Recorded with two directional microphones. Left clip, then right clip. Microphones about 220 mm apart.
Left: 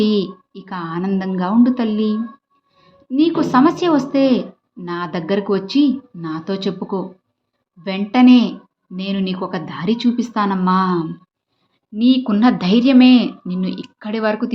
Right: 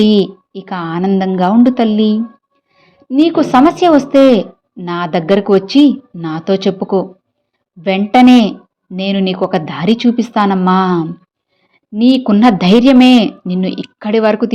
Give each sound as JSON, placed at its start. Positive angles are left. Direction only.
{"t": 0.0, "sound": "a woman's voice", "side_deg": -35}